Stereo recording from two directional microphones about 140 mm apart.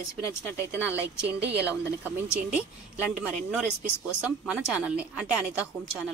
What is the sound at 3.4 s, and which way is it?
Speech, 10° right (ahead or behind).